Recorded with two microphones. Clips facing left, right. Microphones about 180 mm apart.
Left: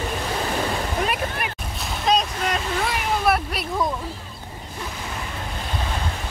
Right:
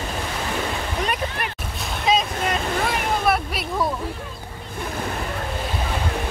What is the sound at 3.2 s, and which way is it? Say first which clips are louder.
Speech: even; centre (ahead or behind).